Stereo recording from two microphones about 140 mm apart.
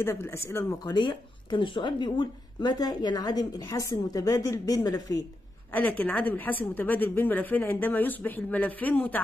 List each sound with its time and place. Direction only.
0.0 s speech: 20° left (ahead or behind)
0.8 s speech: 35° left (ahead or behind)
5.7 s speech: 10° left (ahead or behind)